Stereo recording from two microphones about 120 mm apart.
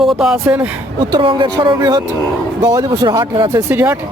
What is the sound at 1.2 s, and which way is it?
Speech, 45° right (ahead or behind).